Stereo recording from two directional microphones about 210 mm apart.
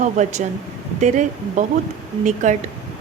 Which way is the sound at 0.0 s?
35° right (ahead or behind).